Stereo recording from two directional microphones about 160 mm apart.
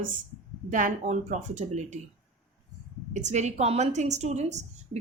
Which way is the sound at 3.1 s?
45° right (ahead or behind).